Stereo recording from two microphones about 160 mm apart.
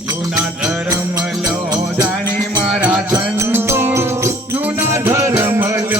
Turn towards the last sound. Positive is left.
turn(degrees=-15)  # may be behind; listen again after turning